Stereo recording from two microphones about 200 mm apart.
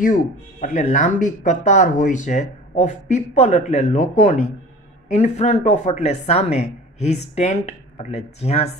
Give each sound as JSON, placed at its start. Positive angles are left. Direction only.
{"t": 0.0, "sound": "speech", "side_deg": 40}